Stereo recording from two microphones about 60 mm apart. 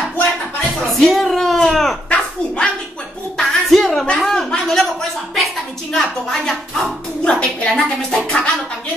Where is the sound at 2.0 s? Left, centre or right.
Centre.